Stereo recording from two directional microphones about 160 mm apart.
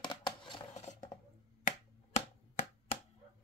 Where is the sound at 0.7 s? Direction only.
45° left (ahead or behind).